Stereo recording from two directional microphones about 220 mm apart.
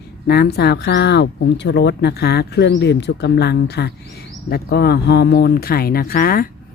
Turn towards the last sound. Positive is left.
turn(degrees=40)  # may be behind; listen again after turning